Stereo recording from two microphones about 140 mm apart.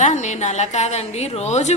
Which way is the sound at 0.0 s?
55° left (ahead or behind).